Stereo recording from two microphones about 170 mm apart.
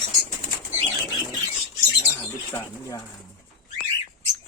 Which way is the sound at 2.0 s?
15° left (ahead or behind).